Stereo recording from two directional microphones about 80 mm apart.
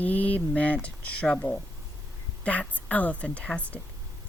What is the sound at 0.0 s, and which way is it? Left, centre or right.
Speech, centre.